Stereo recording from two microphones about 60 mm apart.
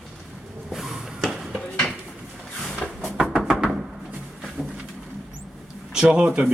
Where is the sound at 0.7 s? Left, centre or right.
Centre.